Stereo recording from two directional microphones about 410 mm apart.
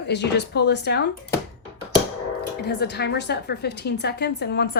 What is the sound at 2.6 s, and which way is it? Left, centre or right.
A woman's voice, left.